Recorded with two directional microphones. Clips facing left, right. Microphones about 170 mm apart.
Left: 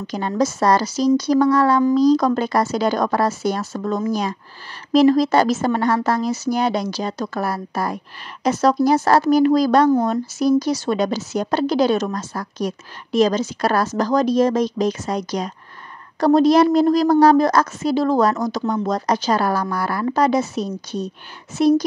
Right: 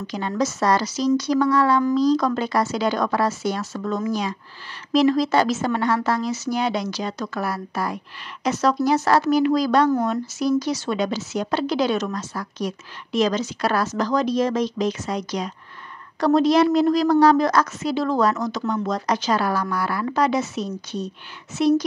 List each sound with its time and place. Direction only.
0.0 s a woman's voice: 45° left (ahead or behind)